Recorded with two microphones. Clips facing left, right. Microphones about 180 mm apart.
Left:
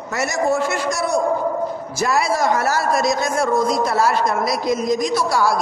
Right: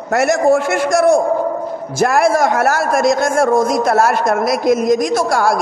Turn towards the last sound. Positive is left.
turn(degrees=-50)  # may be behind; listen again after turning